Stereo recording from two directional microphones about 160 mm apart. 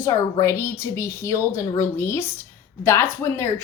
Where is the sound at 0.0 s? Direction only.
20° left (ahead or behind).